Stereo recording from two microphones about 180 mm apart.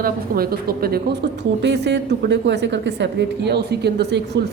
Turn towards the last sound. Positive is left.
turn(degrees=-70)  # may be behind; listen again after turning